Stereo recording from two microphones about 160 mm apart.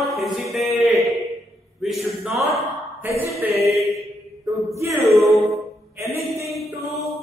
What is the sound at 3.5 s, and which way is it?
Mantra, 40° right (ahead or behind).